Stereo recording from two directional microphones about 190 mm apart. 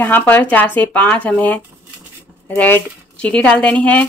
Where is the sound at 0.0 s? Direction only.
10° left (ahead or behind).